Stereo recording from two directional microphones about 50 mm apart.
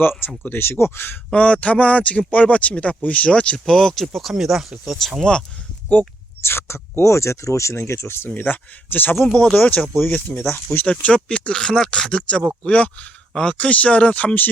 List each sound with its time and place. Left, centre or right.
0.0 s speech: left
1.3 s speech: left
3.7 s speech: centre
5.9 s speech: left
6.4 s speech: left
7.8 s speech: left
8.4 s speech: left
9.1 s speech: centre
9.6 s speech: left
11.0 s speech: left
12.6 s speech: left